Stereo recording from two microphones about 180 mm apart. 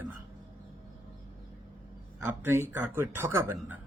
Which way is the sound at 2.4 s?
15° right (ahead or behind).